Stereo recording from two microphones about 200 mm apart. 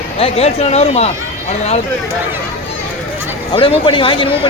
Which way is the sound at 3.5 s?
25° left (ahead or behind).